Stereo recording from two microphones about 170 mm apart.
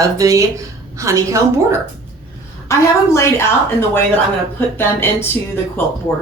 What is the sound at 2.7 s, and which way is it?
Speech, 15° left (ahead or behind).